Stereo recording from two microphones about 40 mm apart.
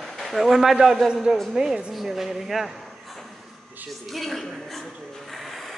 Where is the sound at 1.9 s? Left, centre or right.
Centre.